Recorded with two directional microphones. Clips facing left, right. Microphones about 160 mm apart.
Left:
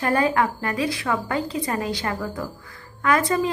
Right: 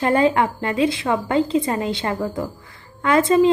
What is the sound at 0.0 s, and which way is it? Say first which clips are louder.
A woman's voice: right 4 dB; 25° right (ahead or behind).